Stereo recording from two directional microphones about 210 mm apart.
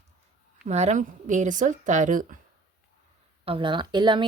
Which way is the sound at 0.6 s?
35° right (ahead or behind).